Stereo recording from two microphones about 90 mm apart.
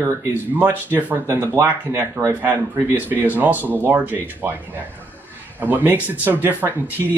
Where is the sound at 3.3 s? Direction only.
20° right (ahead or behind).